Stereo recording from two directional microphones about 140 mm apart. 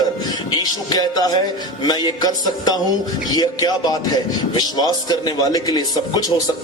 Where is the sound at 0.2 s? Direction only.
30° left (ahead or behind).